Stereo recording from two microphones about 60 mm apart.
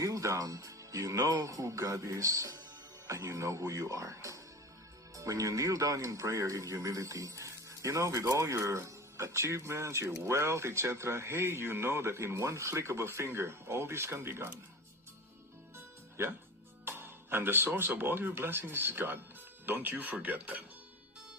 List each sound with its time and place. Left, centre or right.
0.0 s a man's voice: right
15.7 s music: right
16.8 s speech: right